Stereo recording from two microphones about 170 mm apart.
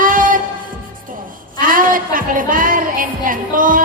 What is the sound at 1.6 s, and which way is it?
Music, 55° right (ahead or behind).